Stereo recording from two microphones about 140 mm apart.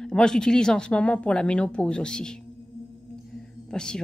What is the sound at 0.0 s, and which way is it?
Speech, 5° left (ahead or behind).